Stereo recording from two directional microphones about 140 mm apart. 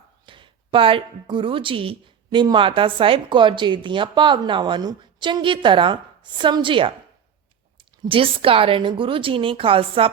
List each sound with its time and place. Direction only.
0.3 s a woman's voice: 35° right (ahead or behind)